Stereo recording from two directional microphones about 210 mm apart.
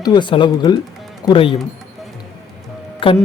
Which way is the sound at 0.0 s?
20° left (ahead or behind).